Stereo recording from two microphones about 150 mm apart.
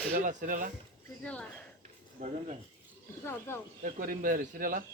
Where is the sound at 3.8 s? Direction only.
65° right (ahead or behind).